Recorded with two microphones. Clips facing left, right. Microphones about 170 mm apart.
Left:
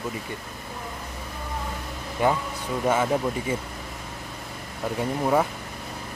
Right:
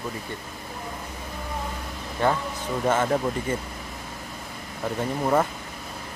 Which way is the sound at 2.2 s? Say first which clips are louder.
Even; 10° left (ahead or behind).